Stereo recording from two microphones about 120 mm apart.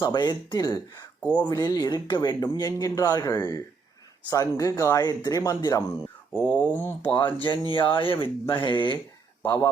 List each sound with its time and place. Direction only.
0.0 s speech: 35° left (ahead or behind)
1.2 s speech: 15° left (ahead or behind)
1.5 s speech: 35° left (ahead or behind)
6.3 s speech: 15° left (ahead or behind)
7.2 s speech: 45° left (ahead or behind)
9.4 s speech: 20° left (ahead or behind)